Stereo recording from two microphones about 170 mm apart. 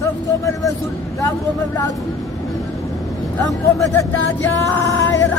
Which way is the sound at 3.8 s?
15° left (ahead or behind).